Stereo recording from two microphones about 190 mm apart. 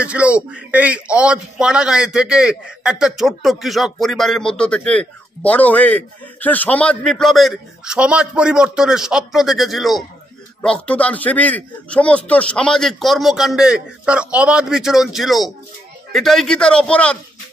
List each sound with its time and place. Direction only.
0.0 s a man's voice: 5° right (ahead or behind)